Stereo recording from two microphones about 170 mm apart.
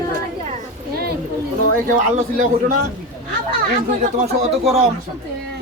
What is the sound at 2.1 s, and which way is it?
Speech, 50° right (ahead or behind).